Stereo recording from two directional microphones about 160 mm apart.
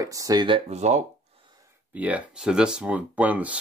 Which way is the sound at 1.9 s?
10° right (ahead or behind).